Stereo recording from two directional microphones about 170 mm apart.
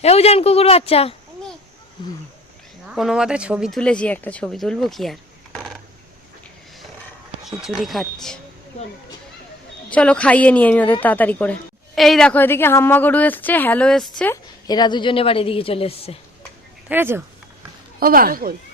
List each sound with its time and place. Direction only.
0.0 s a woman's voice: 35° left (ahead or behind)
2.8 s speech: centre (ahead or behind)
7.6 s speech: centre (ahead or behind)
9.9 s a woman's voice: 5° left (ahead or behind)
14.7 s a woman's voice: 25° left (ahead or behind)
16.9 s speech: 15° right (ahead or behind)
18.0 s speech: 60° right (ahead or behind)